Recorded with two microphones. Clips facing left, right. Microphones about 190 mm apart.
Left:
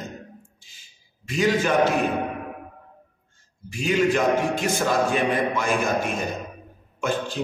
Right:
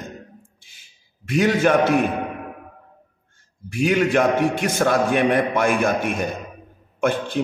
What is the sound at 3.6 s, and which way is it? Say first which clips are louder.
A man's voice: right 2 dB; 55° right (ahead or behind).